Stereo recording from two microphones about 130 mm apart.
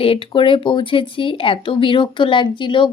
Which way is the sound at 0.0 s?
45° left (ahead or behind).